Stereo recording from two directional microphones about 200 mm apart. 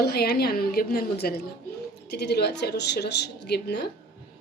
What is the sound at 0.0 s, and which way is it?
A woman's voice, 50° left (ahead or behind).